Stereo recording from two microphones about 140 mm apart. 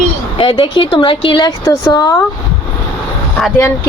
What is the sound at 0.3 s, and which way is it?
Speech, 40° left (ahead or behind).